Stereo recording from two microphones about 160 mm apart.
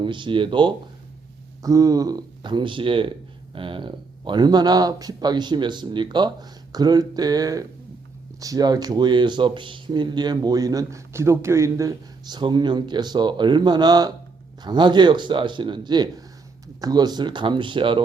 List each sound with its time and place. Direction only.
0.0 s speech: 30° right (ahead or behind)